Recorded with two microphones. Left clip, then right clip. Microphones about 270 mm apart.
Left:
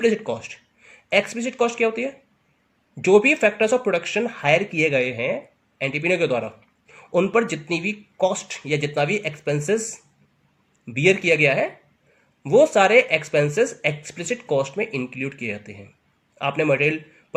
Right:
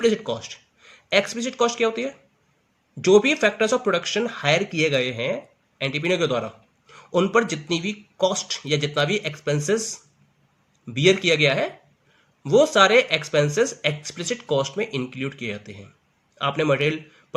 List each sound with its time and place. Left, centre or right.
0.0 s speech: centre
3.0 s speech: centre
10.8 s speech: centre